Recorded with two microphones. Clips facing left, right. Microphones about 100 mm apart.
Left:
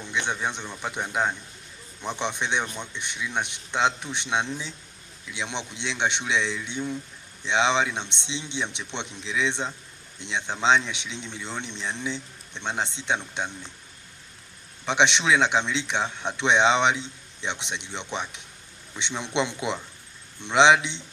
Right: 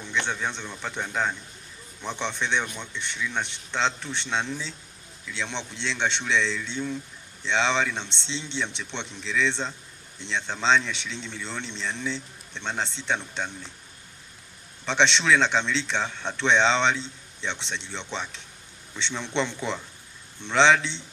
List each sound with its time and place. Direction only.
0.0 s speech: 15° left (ahead or behind)
14.8 s speech: 15° left (ahead or behind)